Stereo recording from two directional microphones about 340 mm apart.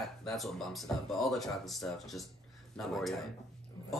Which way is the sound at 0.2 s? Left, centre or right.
Centre.